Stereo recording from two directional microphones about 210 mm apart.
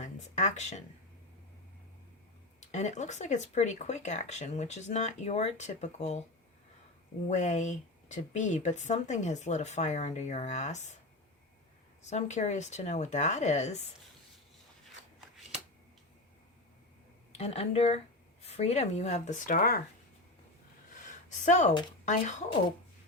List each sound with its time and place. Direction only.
0.0 s speech: 35° left (ahead or behind)
2.6 s speech: 35° left (ahead or behind)
7.3 s speech: 35° left (ahead or behind)
12.0 s speech: 35° left (ahead or behind)
17.3 s speech: 30° left (ahead or behind)
21.2 s a woman's voice: 35° left (ahead or behind)